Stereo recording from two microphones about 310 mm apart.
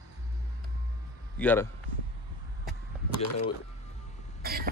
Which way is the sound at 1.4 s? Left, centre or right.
Centre.